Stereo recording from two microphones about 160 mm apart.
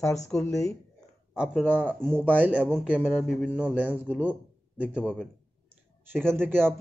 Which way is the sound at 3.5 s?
10° right (ahead or behind).